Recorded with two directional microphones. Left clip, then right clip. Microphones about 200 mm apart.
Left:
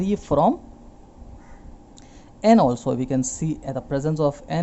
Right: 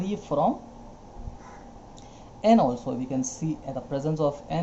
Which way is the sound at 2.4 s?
50° left (ahead or behind).